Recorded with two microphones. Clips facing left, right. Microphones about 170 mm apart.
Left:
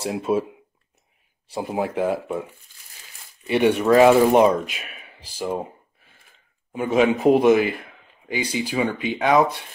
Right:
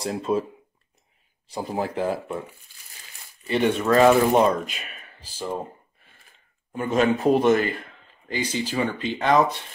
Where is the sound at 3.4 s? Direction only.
15° left (ahead or behind).